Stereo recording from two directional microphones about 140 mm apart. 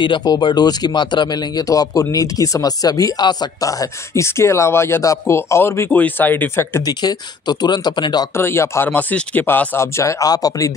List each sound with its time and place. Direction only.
0.0 s speech: 30° left (ahead or behind)
6.9 s speech: 30° left (ahead or behind)
8.4 s speech: 20° left (ahead or behind)